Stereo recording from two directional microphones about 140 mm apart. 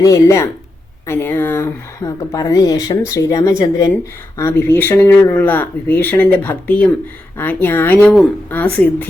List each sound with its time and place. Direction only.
0.0 s speech: 20° left (ahead or behind)